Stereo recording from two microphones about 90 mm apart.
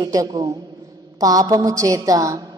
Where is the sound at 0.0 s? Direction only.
45° right (ahead or behind).